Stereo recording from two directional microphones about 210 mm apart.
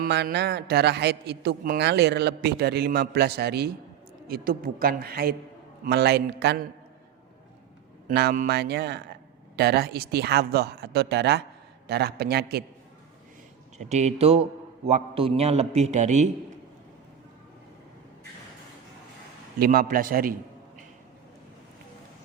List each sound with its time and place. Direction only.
0.0 s a man's voice: 50° right (ahead or behind)
8.0 s a man's voice: 50° right (ahead or behind)
13.7 s a man's voice: 35° right (ahead or behind)
19.5 s a man's voice: 45° right (ahead or behind)